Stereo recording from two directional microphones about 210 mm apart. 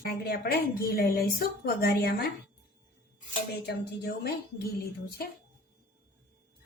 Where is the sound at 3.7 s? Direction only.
50° left (ahead or behind).